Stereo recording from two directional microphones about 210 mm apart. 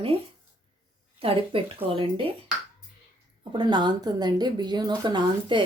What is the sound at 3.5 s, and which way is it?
Speech, 20° right (ahead or behind).